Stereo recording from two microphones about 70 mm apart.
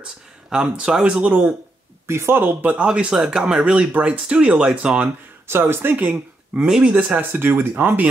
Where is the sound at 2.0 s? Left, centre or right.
Right.